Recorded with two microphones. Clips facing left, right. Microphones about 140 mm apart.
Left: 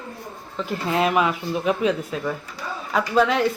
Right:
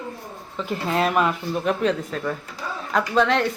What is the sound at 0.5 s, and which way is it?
A woman's voice, centre (ahead or behind).